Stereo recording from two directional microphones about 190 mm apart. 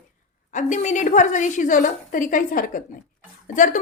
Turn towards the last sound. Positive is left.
turn(degrees=40)  # may be behind; listen again after turning